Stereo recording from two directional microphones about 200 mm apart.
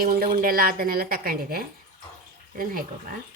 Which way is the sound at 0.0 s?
45° right (ahead or behind).